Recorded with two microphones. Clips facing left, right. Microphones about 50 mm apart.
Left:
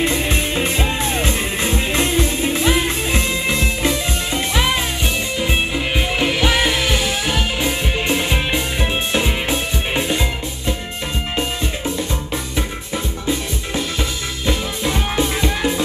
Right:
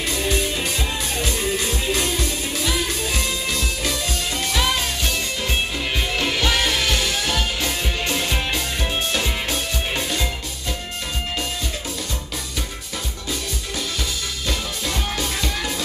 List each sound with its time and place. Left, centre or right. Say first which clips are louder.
0.0 s music: left 4 dB; left
14.4 s music: left 7 dB; left